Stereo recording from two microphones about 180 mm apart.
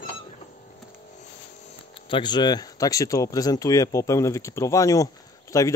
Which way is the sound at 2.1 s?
25° left (ahead or behind).